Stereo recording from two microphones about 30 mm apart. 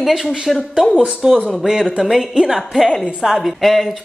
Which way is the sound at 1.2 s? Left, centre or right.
Right.